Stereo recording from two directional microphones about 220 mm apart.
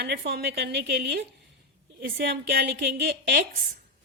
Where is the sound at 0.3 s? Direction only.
45° right (ahead or behind).